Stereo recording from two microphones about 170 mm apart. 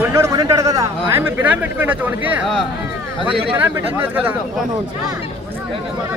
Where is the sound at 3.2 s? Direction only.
30° right (ahead or behind).